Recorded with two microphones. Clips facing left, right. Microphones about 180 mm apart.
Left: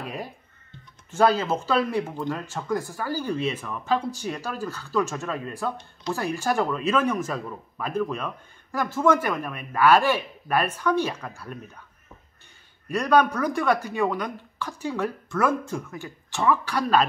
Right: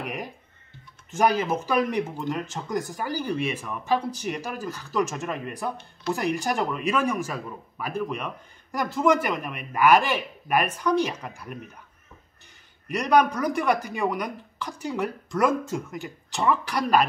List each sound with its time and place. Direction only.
0.0 s a sound: 15° right (ahead or behind)
1.1 s speech: 15° right (ahead or behind)
12.8 s speech: 15° right (ahead or behind)